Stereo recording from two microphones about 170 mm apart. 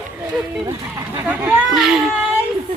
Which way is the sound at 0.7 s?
20° right (ahead or behind).